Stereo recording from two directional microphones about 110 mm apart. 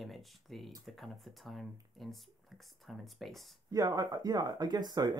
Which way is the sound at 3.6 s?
35° right (ahead or behind).